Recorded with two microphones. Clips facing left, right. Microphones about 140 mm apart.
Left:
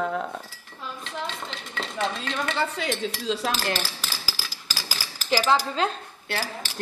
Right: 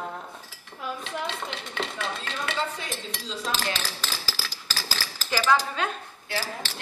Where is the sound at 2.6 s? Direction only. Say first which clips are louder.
Left 5 dB; 80° left.